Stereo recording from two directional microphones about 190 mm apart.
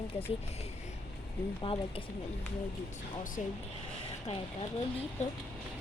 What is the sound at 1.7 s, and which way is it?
Speech, 30° left (ahead or behind).